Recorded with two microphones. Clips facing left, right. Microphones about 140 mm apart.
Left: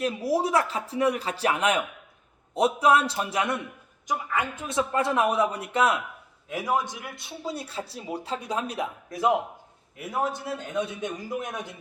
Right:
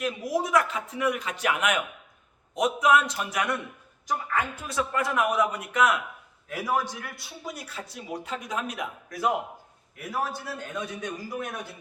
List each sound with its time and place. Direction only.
0.0 s speech: 30° left (ahead or behind)
4.1 s a woman's voice: 5° left (ahead or behind)
4.6 s a man's voice: 25° left (ahead or behind)